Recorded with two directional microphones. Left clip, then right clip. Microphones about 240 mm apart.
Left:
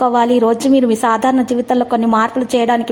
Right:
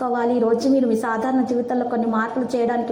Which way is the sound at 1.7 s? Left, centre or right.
Left.